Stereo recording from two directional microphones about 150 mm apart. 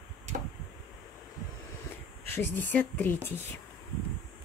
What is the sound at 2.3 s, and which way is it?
Speech, 15° left (ahead or behind).